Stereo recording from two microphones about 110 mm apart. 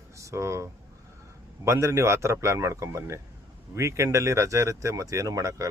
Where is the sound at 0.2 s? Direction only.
25° right (ahead or behind).